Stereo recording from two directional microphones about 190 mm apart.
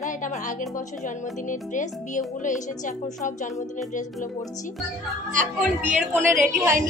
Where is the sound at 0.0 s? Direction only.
40° left (ahead or behind).